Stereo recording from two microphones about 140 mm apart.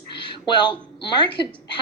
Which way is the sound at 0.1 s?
35° left (ahead or behind).